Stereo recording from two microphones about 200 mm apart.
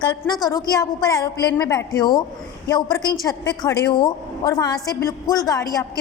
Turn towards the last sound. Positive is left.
turn(degrees=20)  # may be behind; listen again after turning